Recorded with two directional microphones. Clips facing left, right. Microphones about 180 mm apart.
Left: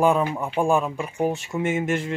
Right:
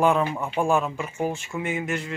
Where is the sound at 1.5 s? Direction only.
45° left (ahead or behind).